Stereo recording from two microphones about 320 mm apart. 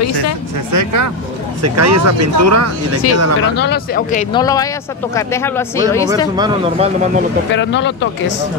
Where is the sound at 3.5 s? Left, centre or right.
Left; by 6.0 s centre.